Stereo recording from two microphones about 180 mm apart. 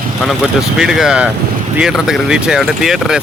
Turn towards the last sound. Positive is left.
turn(degrees=0)  # may be behind; listen again after turning